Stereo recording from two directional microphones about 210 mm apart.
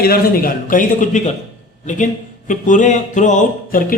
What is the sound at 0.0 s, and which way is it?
Speech, 45° left (ahead or behind).